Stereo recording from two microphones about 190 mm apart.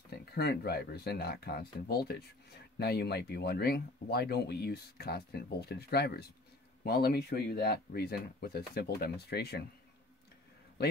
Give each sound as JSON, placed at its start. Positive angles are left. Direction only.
{"t": 0.1, "sound": "speech", "side_deg": 55}